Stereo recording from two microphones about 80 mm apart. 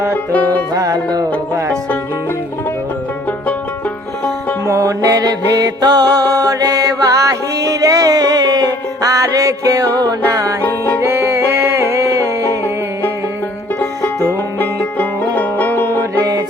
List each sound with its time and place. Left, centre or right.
0.1 s music: left
0.7 s music: right
4.6 s music: right
11.0 s music: right
13.7 s music: left